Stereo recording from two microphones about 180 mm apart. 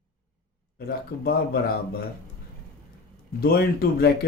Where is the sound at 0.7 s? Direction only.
60° left (ahead or behind).